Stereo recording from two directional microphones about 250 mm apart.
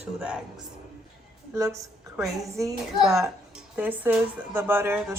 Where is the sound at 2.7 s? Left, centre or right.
Centre.